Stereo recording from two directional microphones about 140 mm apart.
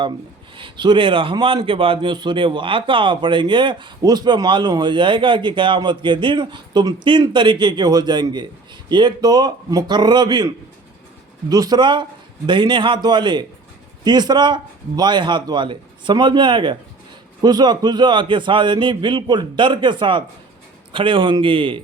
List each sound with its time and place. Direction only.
0.5 s a man's voice: 35° right (ahead or behind)